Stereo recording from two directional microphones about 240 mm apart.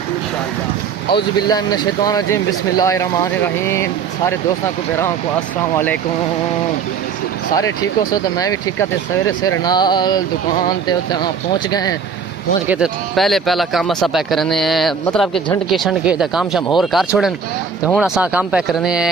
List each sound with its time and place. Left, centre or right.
1.0 s speech: centre
7.5 s speech: centre
12.6 s speech: centre